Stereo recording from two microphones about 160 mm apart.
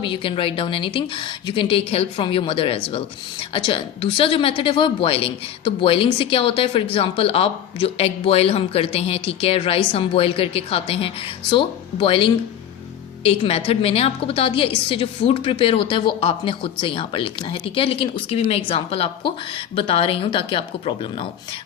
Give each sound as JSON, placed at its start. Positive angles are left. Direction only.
{"t": 0.0, "sound": "speech", "side_deg": 30}